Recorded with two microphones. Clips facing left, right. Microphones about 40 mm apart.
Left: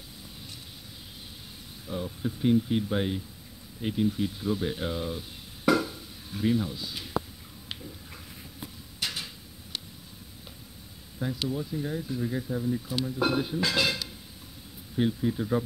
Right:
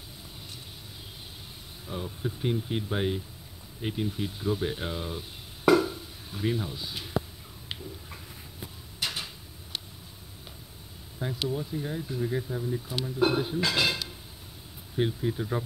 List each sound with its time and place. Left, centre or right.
1.9 s speech: centre
5.7 s a sound: right
6.3 s speech: centre
6.7 s speech: right
7.2 s a sound: centre
9.0 s a sound: right
11.4 s speech: centre
13.0 s speech: centre
13.6 s speech: right
15.1 s speech: centre